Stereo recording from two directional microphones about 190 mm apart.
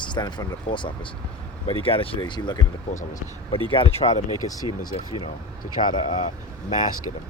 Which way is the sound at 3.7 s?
30° left (ahead or behind).